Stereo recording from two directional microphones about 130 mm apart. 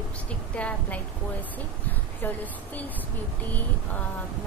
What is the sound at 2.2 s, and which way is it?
Speech, 15° left (ahead or behind).